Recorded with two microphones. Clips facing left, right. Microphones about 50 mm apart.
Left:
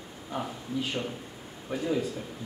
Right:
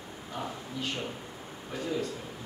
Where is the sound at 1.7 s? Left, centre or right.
Centre.